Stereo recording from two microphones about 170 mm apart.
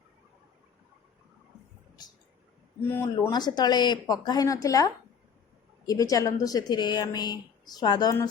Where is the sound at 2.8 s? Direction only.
15° left (ahead or behind).